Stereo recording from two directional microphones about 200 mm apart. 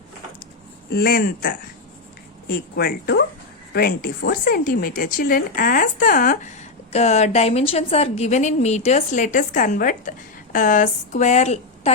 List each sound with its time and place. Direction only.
0.9 s a woman's voice: 50° left (ahead or behind); by 11.9 s 30° left (ahead or behind)